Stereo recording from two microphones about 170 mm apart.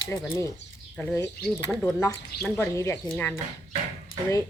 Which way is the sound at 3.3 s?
25° right (ahead or behind).